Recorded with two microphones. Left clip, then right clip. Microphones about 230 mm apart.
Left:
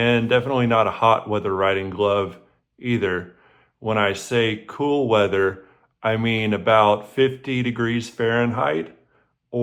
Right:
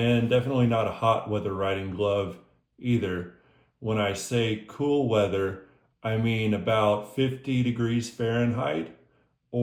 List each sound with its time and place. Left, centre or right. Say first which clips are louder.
0.0 s speech: left 6 dB; centre